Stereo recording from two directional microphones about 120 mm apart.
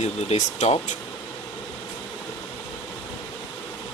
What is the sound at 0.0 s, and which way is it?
Speech, 65° left (ahead or behind).